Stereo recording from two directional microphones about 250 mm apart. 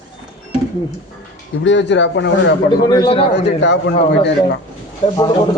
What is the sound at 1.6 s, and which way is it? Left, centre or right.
Speech, left.